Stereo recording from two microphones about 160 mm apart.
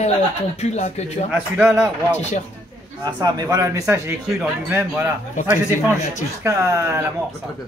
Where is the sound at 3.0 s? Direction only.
25° right (ahead or behind).